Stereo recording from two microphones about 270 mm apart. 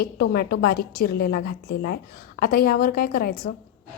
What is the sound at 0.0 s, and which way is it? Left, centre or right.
A woman's voice, left.